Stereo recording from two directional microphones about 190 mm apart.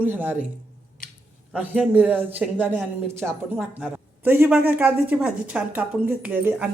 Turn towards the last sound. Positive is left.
turn(degrees=-5)  # may be behind; listen again after turning